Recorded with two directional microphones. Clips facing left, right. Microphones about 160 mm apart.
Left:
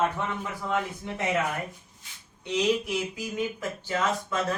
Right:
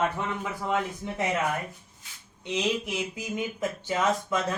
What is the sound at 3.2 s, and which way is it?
Speech, 20° right (ahead or behind).